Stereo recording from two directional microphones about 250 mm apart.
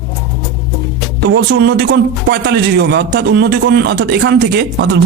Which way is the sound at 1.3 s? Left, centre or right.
Right.